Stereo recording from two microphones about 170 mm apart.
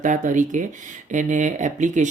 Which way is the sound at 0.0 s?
50° right (ahead or behind).